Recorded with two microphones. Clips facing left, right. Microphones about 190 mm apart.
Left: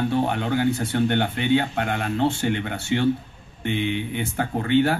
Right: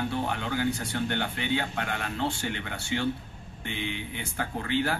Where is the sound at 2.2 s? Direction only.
20° left (ahead or behind).